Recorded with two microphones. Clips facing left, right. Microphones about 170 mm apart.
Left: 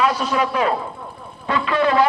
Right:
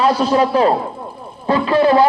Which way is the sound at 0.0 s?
30° right (ahead or behind).